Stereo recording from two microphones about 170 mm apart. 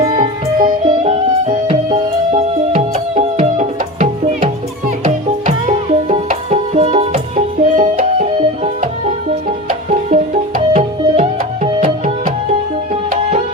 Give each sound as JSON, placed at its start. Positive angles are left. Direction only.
{"t": 0.1, "sound": "music", "side_deg": -30}
{"t": 9.3, "sound": "music", "side_deg": -45}